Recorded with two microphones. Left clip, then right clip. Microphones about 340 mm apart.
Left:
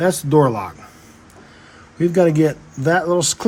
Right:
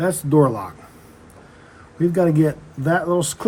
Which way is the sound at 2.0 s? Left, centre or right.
Left.